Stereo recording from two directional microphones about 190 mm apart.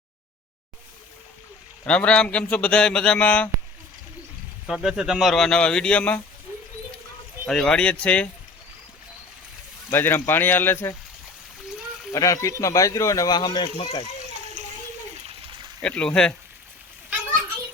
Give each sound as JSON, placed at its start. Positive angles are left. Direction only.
{"t": 1.9, "sound": "speech", "side_deg": 5}
{"t": 4.6, "sound": "speech", "side_deg": 0}
{"t": 7.4, "sound": "speech", "side_deg": 5}
{"t": 9.9, "sound": "speech", "side_deg": 10}
{"t": 12.1, "sound": "speech", "side_deg": 15}
{"t": 14.6, "sound": "a sound", "side_deg": -40}
{"t": 15.8, "sound": "speech", "side_deg": 5}